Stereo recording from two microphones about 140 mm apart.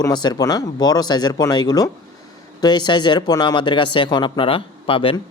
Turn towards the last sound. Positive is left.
turn(degrees=40)  # may be behind; listen again after turning